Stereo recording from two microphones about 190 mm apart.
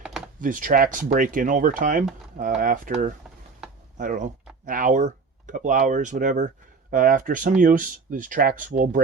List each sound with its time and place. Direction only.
0.3 s speech: 45° right (ahead or behind)